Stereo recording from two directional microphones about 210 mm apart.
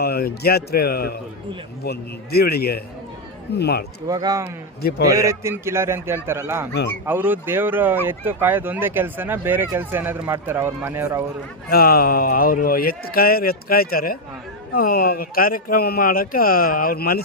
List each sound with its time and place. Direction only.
0.0 s a man's voice: 50° left (ahead or behind)
4.0 s speech: 20° right (ahead or behind)
4.8 s a man's voice: 50° left (ahead or behind)
5.0 s speech: 15° right (ahead or behind)
11.7 s a man's voice: 45° left (ahead or behind)